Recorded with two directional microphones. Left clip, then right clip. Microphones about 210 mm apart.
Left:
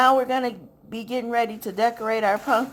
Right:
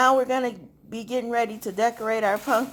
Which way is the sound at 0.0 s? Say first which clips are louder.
Left 1 dB; 5° left (ahead or behind).